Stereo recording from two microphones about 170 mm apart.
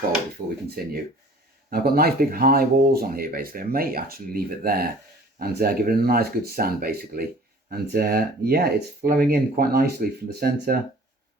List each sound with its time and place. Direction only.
0.8 s speech: 60° right (ahead or behind)